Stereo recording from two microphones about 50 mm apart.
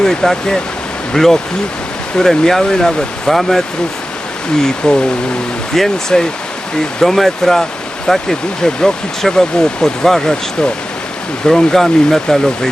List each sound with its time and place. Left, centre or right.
0.0 s speech: centre
4.8 s speech: centre
11.4 s speech: centre